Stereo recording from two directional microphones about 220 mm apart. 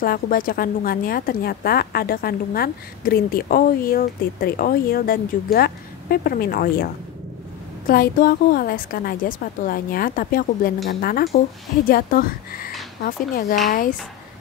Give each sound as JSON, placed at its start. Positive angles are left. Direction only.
{"t": 0.0, "sound": "a woman's voice", "side_deg": 40}